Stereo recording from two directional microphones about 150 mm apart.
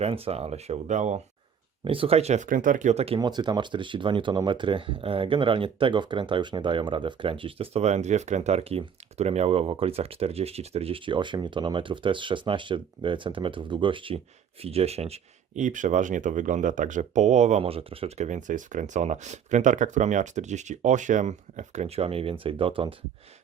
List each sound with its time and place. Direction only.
0.0 s speech: 40° right (ahead or behind)
1.8 s speech: 35° right (ahead or behind)
3.2 s speech: 30° right (ahead or behind)